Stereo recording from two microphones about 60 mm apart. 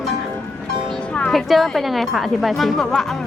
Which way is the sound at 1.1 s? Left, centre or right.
Centre.